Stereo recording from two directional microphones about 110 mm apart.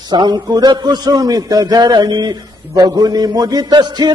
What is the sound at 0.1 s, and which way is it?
A man's voice, 40° right (ahead or behind).